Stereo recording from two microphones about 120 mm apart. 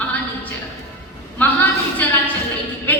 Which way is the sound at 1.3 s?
15° left (ahead or behind).